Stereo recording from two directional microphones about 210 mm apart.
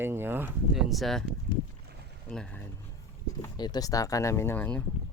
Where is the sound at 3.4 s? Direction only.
20° left (ahead or behind).